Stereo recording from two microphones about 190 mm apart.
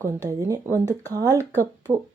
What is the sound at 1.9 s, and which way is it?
Speech, 15° right (ahead or behind).